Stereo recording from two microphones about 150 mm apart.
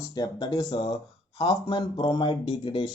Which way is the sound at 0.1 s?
25° left (ahead or behind).